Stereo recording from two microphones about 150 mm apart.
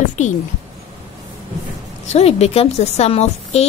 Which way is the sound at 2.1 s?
45° left (ahead or behind).